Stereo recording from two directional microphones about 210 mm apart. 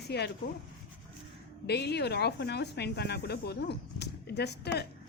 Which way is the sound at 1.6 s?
50° left (ahead or behind).